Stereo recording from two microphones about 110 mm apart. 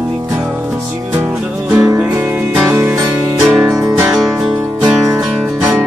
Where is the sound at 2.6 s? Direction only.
25° right (ahead or behind).